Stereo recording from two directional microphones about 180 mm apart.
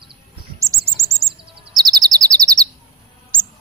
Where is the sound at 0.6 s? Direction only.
15° right (ahead or behind).